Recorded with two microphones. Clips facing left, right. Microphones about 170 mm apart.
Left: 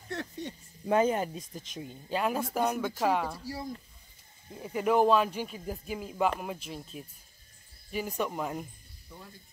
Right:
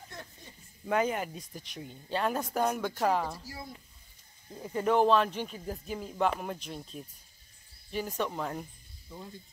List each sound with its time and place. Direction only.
0.1 s a sound: 85° left
0.8 s speech: 25° left (ahead or behind); by 3.4 s centre (ahead or behind)
4.6 s speech: 10° left (ahead or behind)